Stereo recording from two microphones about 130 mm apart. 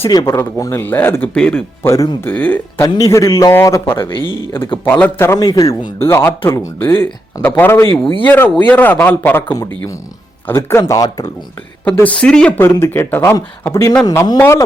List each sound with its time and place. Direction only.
0.3 s a man's voice: 25° left (ahead or behind); by 1.6 s 10° left (ahead or behind)
1.8 s a man's voice: 20° left (ahead or behind)
11.9 s a man's voice: 10° left (ahead or behind)
12.5 s a man's voice: 20° left (ahead or behind)